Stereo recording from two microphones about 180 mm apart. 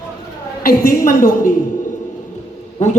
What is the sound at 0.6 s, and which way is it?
Speech, 55° left (ahead or behind).